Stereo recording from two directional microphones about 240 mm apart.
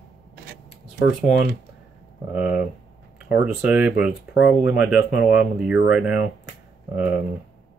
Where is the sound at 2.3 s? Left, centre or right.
Centre.